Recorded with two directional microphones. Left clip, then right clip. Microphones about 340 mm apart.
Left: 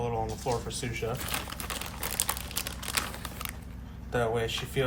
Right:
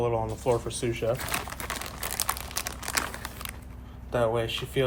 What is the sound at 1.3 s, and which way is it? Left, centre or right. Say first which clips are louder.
Speech: right 3 dB; centre.